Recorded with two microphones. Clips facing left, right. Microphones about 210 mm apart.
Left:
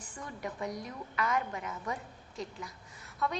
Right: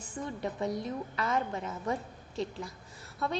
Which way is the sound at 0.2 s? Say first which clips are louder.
Right 5 dB; 25° right (ahead or behind).